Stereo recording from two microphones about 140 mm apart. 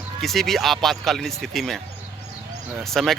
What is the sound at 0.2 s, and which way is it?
Speech, centre (ahead or behind).